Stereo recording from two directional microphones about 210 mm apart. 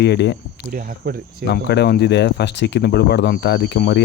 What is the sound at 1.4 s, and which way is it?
Speech, 55° left (ahead or behind).